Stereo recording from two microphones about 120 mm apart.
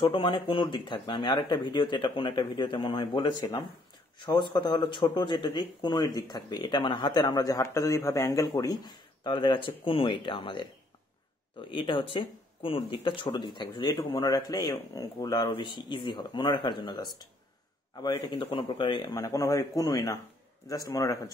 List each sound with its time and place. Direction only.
0.0 s speech: 50° left (ahead or behind)
4.4 s speech: 40° left (ahead or behind)
11.7 s speech: 45° left (ahead or behind)
19.1 s speech: 30° left (ahead or behind)